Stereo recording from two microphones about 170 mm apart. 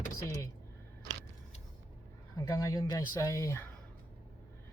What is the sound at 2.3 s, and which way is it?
Speech, 20° left (ahead or behind).